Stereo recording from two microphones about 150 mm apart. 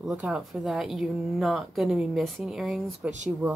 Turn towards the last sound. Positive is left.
turn(degrees=-15)  # may be behind; listen again after turning